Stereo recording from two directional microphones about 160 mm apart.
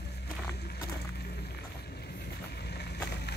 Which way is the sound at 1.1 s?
90° left.